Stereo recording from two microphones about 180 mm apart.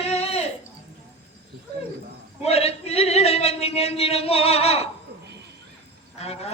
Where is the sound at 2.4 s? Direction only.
35° left (ahead or behind).